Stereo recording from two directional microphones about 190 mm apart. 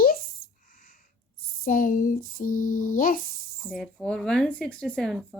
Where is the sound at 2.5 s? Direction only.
90° left.